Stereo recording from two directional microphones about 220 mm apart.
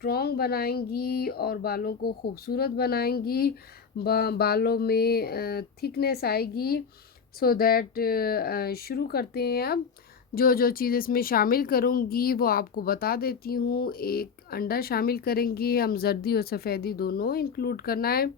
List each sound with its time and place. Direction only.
0.0 s a woman's voice: 45° left (ahead or behind)